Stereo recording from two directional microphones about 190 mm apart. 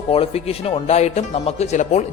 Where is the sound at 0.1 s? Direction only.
30° left (ahead or behind).